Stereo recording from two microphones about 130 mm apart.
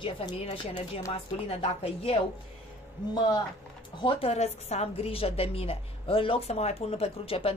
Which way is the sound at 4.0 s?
40° left (ahead or behind).